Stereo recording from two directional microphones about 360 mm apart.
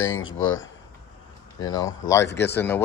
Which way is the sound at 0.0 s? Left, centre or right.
Left.